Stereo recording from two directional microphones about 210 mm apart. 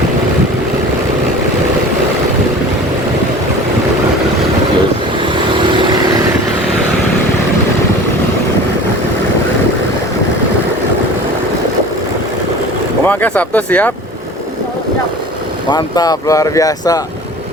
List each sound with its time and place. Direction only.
13.1 s speech: 5° left (ahead or behind)
15.7 s speech: 20° left (ahead or behind)